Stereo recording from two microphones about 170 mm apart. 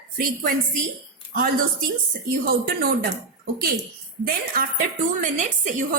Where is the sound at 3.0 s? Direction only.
60° right (ahead or behind).